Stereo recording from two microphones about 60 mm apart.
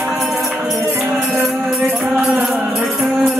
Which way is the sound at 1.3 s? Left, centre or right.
Right.